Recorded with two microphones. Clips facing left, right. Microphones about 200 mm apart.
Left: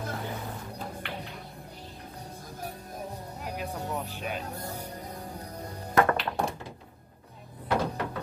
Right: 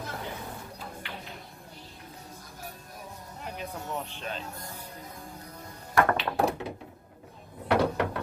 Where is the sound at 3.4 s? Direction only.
5° left (ahead or behind).